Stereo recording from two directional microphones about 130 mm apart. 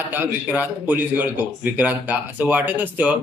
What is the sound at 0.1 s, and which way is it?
Speech, 15° right (ahead or behind).